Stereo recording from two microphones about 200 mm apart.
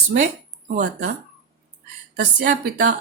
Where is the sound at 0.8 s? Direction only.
40° right (ahead or behind).